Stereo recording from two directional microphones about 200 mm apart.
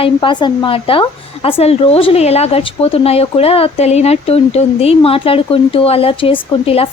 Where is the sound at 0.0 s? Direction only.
25° left (ahead or behind).